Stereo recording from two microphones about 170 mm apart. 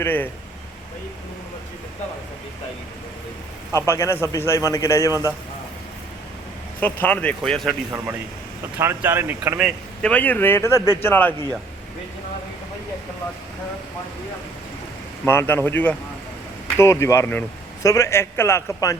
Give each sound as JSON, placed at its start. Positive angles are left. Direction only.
{"t": 0.0, "sound": "speech", "side_deg": 10}
{"t": 3.8, "sound": "speech", "side_deg": 15}
{"t": 6.7, "sound": "speech", "side_deg": 10}
{"t": 8.8, "sound": "speech", "side_deg": -15}
{"t": 10.0, "sound": "speech", "side_deg": 10}
{"t": 15.2, "sound": "speech", "side_deg": 10}